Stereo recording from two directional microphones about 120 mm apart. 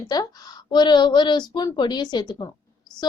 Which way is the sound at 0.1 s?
35° left (ahead or behind).